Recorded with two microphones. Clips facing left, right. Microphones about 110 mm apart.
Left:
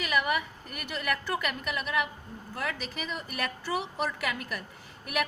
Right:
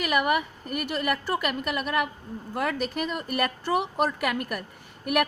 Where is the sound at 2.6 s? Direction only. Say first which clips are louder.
Right 8 dB; 50° right (ahead or behind).